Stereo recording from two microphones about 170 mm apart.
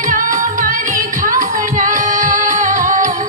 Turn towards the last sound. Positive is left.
turn(degrees=-50)  # may be behind; listen again after turning